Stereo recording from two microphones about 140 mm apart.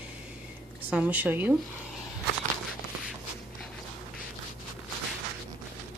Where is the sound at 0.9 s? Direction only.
10° right (ahead or behind).